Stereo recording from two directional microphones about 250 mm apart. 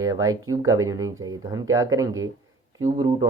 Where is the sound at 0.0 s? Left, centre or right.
Centre.